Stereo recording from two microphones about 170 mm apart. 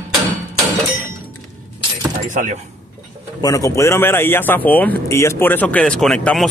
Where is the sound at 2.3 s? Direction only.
45° right (ahead or behind).